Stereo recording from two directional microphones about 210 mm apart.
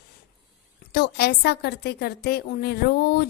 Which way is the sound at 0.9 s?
50° left (ahead or behind).